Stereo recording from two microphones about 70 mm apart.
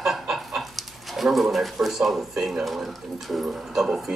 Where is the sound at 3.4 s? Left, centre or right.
Centre.